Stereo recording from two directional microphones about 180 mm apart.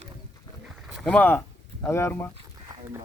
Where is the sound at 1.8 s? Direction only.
15° left (ahead or behind).